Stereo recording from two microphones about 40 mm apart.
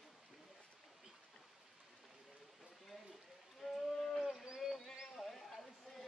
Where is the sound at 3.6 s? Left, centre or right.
Centre.